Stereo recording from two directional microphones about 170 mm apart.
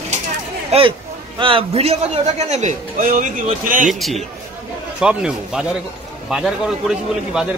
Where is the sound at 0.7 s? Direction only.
35° right (ahead or behind); by 3.9 s 50° right (ahead or behind).